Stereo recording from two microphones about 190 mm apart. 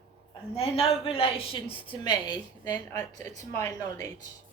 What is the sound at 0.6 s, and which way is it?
A woman's voice, 30° left (ahead or behind).